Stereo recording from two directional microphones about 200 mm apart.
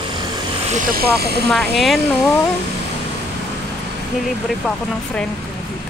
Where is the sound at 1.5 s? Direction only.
Centre (ahead or behind).